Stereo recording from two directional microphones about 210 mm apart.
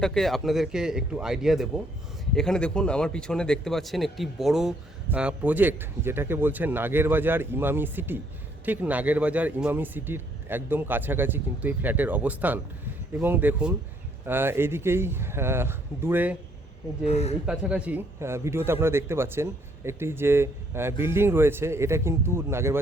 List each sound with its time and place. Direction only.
0.0 s a man's voice: centre (ahead or behind)
17.1 s speech: 30° left (ahead or behind)
17.4 s a man's voice: 5° right (ahead or behind)